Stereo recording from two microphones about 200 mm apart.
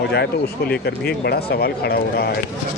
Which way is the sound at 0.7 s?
55° left (ahead or behind).